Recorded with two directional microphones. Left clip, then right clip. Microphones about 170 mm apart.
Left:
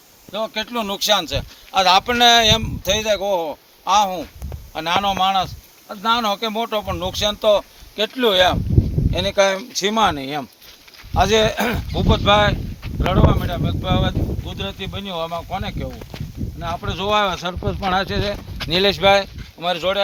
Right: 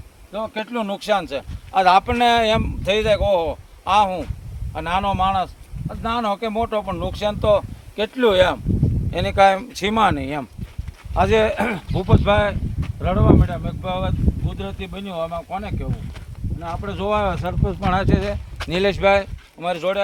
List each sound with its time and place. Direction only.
0.3 s speech: 15° right (ahead or behind)
0.5 s a man's voice: 30° right (ahead or behind)
2.8 s speech: 75° right (ahead or behind)
4.7 s speech: 30° right (ahead or behind)
9.1 s speech: 60° right (ahead or behind)
11.9 s speech: 30° right (ahead or behind)
17.6 s speech: centre (ahead or behind)
18.1 s speech: 20° left (ahead or behind)